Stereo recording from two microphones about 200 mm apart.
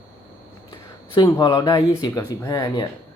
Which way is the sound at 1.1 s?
20° left (ahead or behind).